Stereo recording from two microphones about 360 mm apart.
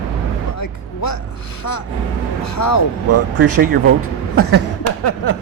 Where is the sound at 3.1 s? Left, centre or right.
Right.